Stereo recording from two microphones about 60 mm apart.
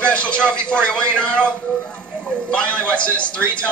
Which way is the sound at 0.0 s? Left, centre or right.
Left.